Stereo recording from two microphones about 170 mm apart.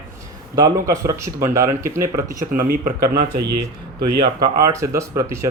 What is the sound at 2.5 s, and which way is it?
Speech, 60° right (ahead or behind).